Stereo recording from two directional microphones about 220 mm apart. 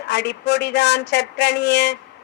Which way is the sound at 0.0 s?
50° left (ahead or behind).